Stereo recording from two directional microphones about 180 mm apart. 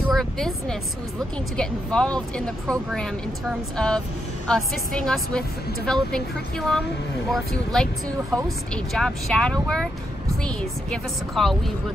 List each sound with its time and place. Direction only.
0.1 s a sound: centre (ahead or behind)
1.6 s speech: 5° left (ahead or behind)
7.2 s speech: centre (ahead or behind)